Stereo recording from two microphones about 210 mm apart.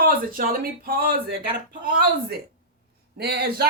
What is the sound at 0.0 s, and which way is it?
Speech, 45° right (ahead or behind).